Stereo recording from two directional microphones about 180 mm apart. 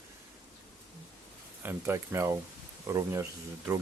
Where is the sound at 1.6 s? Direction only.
15° right (ahead or behind).